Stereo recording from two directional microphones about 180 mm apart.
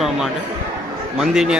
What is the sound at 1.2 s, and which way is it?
Speech, 5° right (ahead or behind).